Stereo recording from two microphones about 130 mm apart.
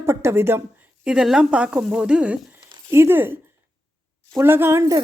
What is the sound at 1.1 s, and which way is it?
A woman's voice, 5° right (ahead or behind).